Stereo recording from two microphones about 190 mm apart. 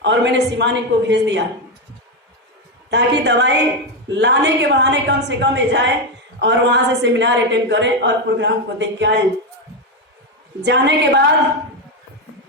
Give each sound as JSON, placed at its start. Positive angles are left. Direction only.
{"t": 0.0, "sound": "a woman's voice", "side_deg": -65}
{"t": 2.9, "sound": "a woman's voice", "side_deg": -70}
{"t": 10.7, "sound": "a woman's voice", "side_deg": -65}